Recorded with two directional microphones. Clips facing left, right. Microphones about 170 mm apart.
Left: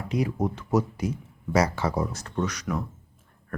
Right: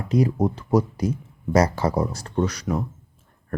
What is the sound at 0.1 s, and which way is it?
Speech, 35° right (ahead or behind).